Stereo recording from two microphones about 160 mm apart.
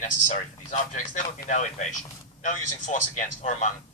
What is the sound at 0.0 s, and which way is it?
A man's voice, 50° left (ahead or behind).